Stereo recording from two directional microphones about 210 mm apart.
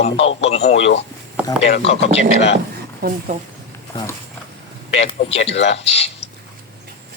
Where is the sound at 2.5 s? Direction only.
45° right (ahead or behind).